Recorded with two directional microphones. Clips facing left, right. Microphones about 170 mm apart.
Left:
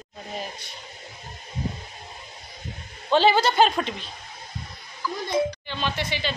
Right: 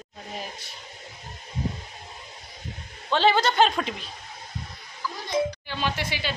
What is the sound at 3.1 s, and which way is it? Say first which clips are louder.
Speech: left 2 dB; 5° left (ahead or behind).